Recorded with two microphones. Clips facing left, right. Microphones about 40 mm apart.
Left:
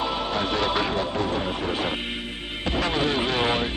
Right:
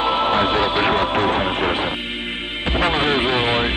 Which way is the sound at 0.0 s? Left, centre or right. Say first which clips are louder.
Right 8 dB; right.